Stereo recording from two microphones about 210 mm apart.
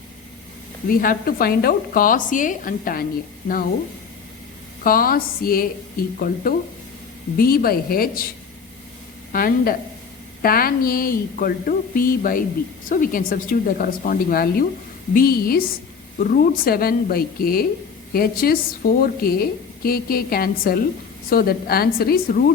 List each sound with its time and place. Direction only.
0.9 s a woman's voice: 45° left (ahead or behind)
4.8 s a woman's voice: 45° left (ahead or behind)
9.3 s a woman's voice: 45° left (ahead or behind)